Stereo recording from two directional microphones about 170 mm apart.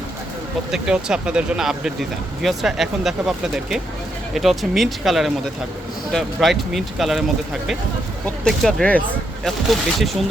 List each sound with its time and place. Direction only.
0.7 s speech: 5° right (ahead or behind)
8.4 s speech: 5° left (ahead or behind)